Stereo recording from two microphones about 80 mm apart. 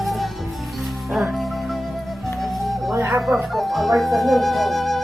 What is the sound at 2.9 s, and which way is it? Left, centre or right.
Speech, right.